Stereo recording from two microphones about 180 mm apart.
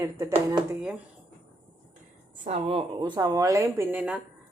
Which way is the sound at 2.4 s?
35° right (ahead or behind).